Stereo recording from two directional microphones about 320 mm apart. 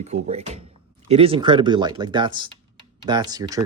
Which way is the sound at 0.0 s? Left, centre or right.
Right.